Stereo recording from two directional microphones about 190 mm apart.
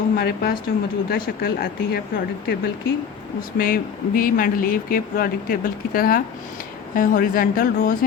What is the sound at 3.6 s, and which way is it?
A woman's voice, 50° left (ahead or behind).